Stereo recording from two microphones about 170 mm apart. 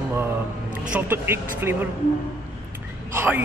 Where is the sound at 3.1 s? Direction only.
15° right (ahead or behind).